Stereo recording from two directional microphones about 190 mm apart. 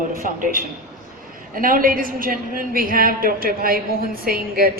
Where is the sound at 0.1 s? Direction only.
45° right (ahead or behind).